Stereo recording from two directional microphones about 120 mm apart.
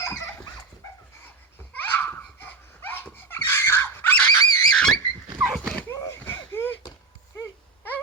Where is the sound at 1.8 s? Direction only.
15° left (ahead or behind).